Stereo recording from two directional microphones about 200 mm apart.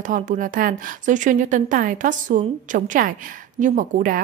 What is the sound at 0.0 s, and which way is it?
A woman's voice, 40° right (ahead or behind).